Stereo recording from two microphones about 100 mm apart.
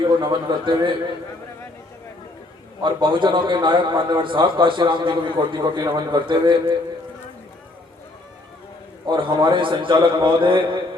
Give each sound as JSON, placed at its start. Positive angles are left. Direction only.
{"t": 0.0, "sound": "a man's voice", "side_deg": -50}
{"t": 2.8, "sound": "a man's voice", "side_deg": -55}
{"t": 9.0, "sound": "a man's voice", "side_deg": -55}